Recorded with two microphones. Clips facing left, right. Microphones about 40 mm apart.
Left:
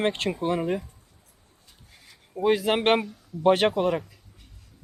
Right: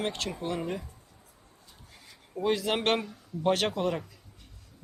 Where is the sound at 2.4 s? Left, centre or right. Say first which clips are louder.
Left 5 dB; centre.